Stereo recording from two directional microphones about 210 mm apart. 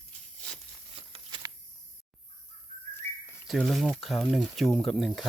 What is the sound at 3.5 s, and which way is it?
Speech, centre (ahead or behind).